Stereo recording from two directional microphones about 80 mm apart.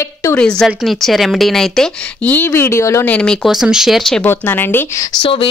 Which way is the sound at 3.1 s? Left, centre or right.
Centre.